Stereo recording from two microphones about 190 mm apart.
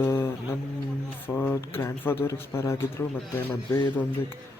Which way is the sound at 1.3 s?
10° left (ahead or behind).